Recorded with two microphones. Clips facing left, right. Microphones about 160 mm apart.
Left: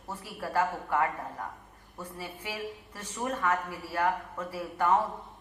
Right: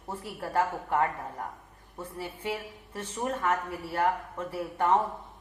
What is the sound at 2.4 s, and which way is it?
A woman's voice, 25° right (ahead or behind).